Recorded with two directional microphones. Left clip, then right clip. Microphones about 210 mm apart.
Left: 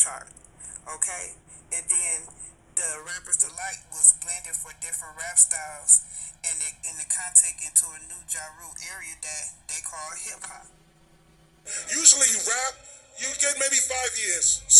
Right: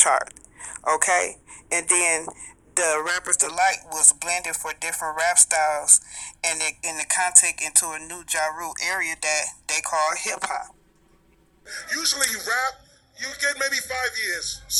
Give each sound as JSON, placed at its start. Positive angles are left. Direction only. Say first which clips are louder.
{"t": 0.0, "sound": "a man's voice", "louder": "right 11 dB", "side_deg": -45}
{"t": 11.7, "sound": "speech", "louder": "left 3 dB", "side_deg": 0}